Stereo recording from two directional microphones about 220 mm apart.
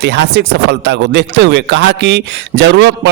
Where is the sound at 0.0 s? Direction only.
50° right (ahead or behind).